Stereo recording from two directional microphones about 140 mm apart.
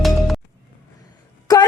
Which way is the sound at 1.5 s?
30° left (ahead or behind).